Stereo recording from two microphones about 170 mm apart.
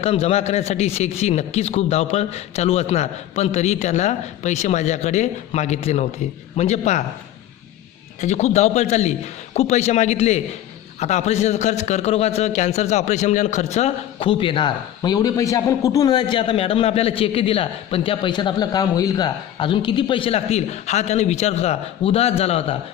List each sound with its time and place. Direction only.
0.0 s a man's voice: 35° left (ahead or behind)
8.2 s a man's voice: 40° left (ahead or behind)